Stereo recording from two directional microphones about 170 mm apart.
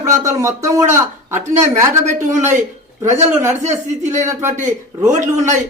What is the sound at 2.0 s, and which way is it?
A man's voice, 45° right (ahead or behind).